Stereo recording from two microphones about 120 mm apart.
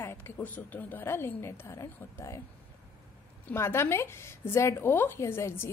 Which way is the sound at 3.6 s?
20° left (ahead or behind).